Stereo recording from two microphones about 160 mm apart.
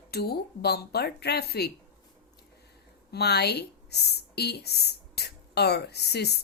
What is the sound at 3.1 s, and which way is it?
Speech, 90° left.